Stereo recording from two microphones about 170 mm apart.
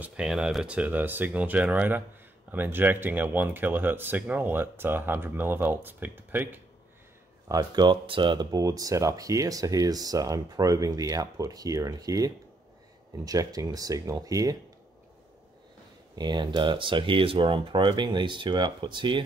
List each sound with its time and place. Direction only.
0.0 s speech: 5° right (ahead or behind)
7.4 s speech: 20° right (ahead or behind)
16.2 s speech: 25° right (ahead or behind)